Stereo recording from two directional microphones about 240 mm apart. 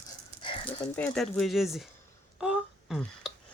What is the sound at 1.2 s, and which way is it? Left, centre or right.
Speech, centre.